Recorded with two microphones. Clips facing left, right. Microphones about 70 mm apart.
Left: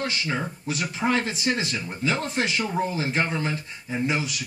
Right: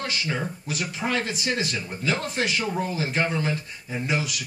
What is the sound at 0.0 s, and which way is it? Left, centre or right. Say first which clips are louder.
Speech: left 1 dB; left.